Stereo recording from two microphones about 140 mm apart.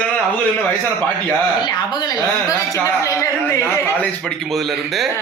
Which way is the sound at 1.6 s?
30° left (ahead or behind).